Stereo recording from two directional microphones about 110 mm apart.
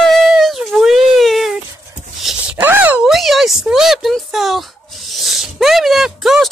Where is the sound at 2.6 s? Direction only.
15° right (ahead or behind).